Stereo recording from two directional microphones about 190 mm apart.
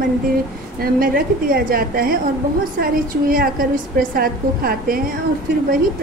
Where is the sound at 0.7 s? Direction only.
50° right (ahead or behind).